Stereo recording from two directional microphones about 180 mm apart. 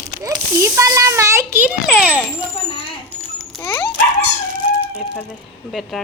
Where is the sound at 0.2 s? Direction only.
20° right (ahead or behind).